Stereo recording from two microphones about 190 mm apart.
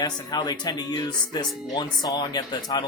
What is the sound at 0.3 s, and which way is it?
Speech, 20° left (ahead or behind).